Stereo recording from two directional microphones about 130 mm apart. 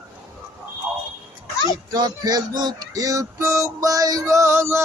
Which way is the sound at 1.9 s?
30° right (ahead or behind).